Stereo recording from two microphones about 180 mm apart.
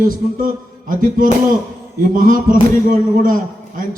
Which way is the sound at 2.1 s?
50° right (ahead or behind).